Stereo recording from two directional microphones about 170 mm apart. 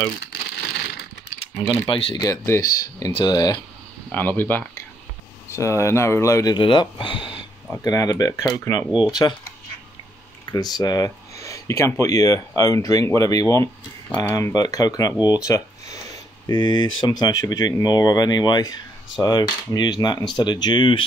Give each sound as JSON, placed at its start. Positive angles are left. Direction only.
{"t": 0.2, "sound": "a sound", "side_deg": 75}
{"t": 1.6, "sound": "speech", "side_deg": 35}
{"t": 2.2, "sound": "speech", "side_deg": 15}
{"t": 4.1, "sound": "speech", "side_deg": 10}
{"t": 10.5, "sound": "speech", "side_deg": 20}
{"t": 15.4, "sound": "a sound", "side_deg": 20}
{"t": 16.4, "sound": "speech", "side_deg": 25}